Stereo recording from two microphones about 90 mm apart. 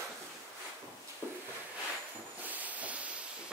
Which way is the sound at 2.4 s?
20° right (ahead or behind).